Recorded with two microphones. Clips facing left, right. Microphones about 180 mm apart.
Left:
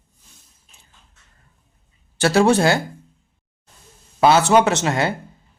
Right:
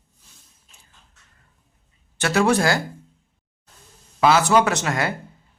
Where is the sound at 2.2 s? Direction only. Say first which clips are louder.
Left 4 dB; 30° left (ahead or behind).